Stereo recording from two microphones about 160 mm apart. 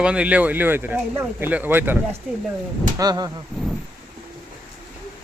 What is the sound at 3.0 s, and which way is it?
Speech, 25° right (ahead or behind).